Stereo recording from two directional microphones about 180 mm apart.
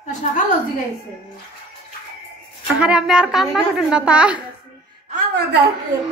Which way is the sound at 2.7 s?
5° right (ahead or behind).